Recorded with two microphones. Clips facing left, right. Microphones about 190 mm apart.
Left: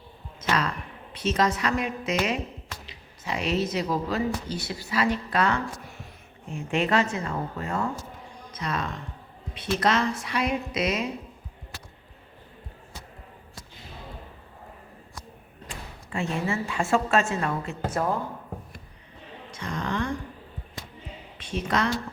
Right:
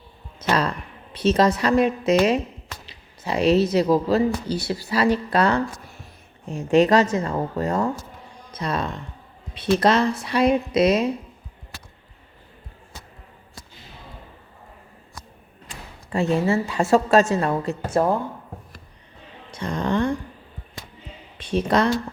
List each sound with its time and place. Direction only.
0.3 s a sound: 35° right (ahead or behind)
1.1 s speech: 35° right (ahead or behind)
16.1 s speech: 35° right (ahead or behind)
19.5 s speech: 30° right (ahead or behind)
21.3 s speech: 35° right (ahead or behind)